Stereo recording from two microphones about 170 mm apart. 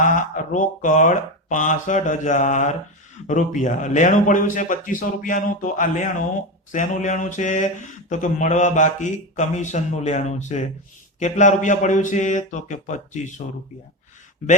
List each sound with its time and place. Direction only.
0.0 s speech: 45° left (ahead or behind)
14.4 s speech: 50° left (ahead or behind)